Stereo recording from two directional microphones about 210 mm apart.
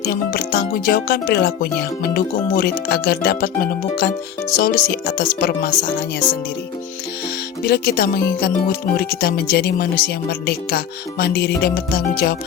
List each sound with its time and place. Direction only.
0.1 s speech: 50° left (ahead or behind)
7.6 s speech: 45° left (ahead or behind)